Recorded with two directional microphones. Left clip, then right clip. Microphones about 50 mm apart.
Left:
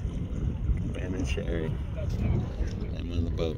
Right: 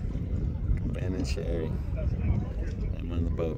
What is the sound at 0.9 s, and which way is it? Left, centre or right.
Speech, right.